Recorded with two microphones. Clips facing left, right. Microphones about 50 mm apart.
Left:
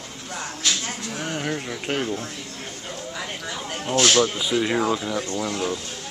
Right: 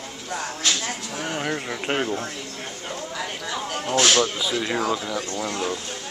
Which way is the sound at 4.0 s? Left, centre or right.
Centre.